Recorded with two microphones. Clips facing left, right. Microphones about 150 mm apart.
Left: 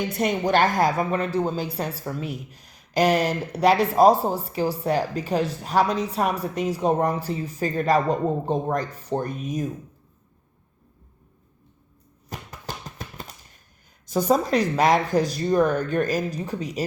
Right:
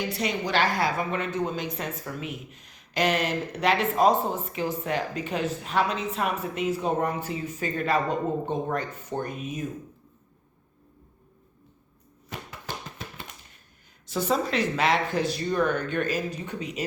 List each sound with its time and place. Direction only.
0.1 s a woman's voice: 50° left (ahead or behind)
12.3 s a sound: 40° left (ahead or behind)
14.1 s a woman's voice: 40° left (ahead or behind)